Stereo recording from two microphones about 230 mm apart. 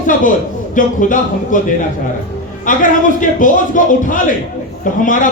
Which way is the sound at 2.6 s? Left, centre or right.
Left.